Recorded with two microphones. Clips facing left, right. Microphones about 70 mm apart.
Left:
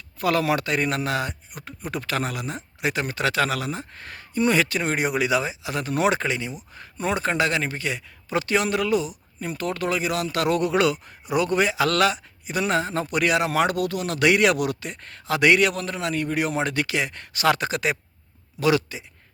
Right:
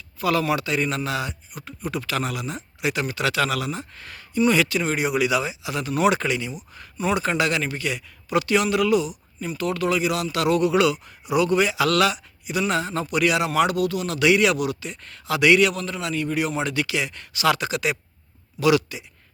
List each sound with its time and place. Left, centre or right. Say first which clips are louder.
0.2 s a man's voice: even; left
6.1 s a man's voice: right 2 dB; left